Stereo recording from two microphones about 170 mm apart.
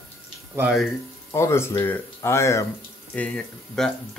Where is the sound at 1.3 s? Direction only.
15° left (ahead or behind).